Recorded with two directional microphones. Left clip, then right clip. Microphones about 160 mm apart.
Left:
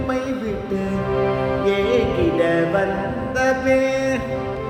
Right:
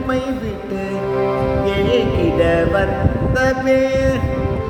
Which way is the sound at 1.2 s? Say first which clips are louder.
Right 2 dB; 15° right (ahead or behind).